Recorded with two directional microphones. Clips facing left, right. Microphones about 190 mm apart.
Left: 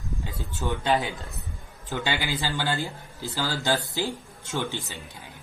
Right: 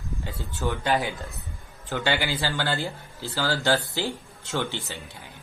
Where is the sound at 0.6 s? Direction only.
20° left (ahead or behind).